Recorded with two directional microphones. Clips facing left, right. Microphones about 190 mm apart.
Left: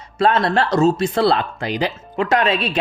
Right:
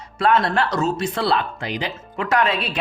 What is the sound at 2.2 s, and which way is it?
Speech, 25° left (ahead or behind).